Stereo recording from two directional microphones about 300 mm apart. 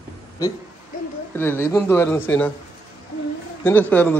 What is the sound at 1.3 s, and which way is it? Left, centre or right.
A man's voice, centre.